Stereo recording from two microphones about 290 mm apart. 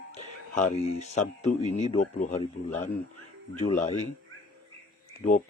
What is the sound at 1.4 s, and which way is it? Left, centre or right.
Speech, left.